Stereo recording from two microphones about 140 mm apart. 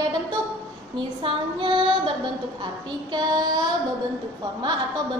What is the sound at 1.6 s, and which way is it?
Female singing, 35° right (ahead or behind).